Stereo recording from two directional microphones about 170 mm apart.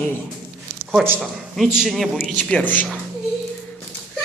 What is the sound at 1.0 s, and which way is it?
A man's voice, 5° right (ahead or behind).